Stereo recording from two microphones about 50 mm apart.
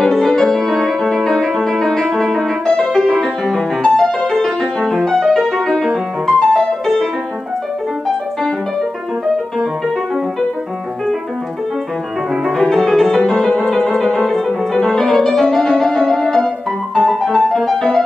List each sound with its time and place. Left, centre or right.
0.0 s music: centre
12.5 s music: centre